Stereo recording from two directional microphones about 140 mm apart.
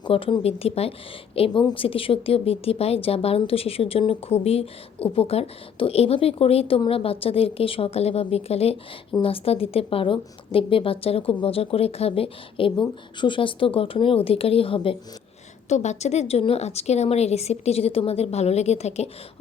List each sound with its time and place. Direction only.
0.0 s a woman's voice: 40° left (ahead or behind)
15.7 s speech: 55° left (ahead or behind)